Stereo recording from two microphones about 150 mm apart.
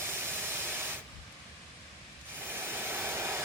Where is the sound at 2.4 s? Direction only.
15° right (ahead or behind).